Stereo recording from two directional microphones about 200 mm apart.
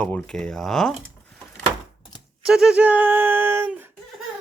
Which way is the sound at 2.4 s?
Centre (ahead or behind).